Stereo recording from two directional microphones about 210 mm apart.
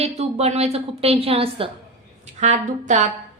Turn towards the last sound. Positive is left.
turn(degrees=-35)  # may be behind; listen again after turning